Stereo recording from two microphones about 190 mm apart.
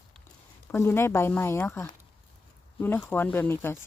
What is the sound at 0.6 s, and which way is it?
Speech, 10° left (ahead or behind).